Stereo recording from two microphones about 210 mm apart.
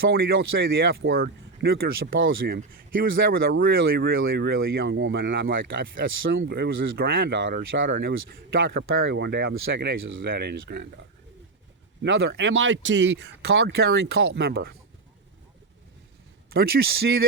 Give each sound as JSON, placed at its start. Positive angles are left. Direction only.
{"t": 0.1, "sound": "speech", "side_deg": -70}
{"t": 1.1, "sound": "speech", "side_deg": -45}
{"t": 2.1, "sound": "speech", "side_deg": -65}
{"t": 2.5, "sound": "speech", "side_deg": -45}
{"t": 4.1, "sound": "speech", "side_deg": -70}
{"t": 5.5, "sound": "speech", "side_deg": -60}
{"t": 12.0, "sound": "speech", "side_deg": -60}
{"t": 16.5, "sound": "speech", "side_deg": -45}